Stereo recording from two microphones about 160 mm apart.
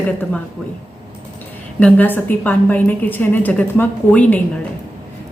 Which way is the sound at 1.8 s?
10° left (ahead or behind).